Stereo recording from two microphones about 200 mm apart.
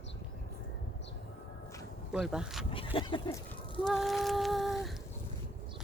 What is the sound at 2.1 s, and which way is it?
Speech, 5° right (ahead or behind).